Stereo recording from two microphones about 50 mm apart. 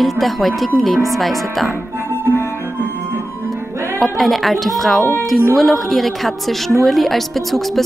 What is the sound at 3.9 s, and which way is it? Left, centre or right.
A woman's voice, centre.